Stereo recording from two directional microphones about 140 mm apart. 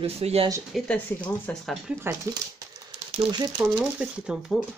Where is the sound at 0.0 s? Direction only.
45° right (ahead or behind).